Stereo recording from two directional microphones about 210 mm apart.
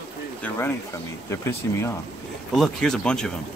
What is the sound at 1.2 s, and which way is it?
Speech, 15° left (ahead or behind).